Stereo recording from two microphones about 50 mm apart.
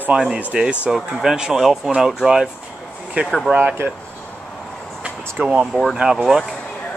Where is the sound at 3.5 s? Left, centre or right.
Right.